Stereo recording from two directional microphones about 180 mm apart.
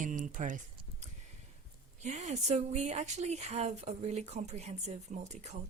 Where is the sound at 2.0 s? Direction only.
40° right (ahead or behind).